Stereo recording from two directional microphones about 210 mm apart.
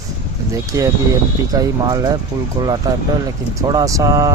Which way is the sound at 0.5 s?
15° right (ahead or behind).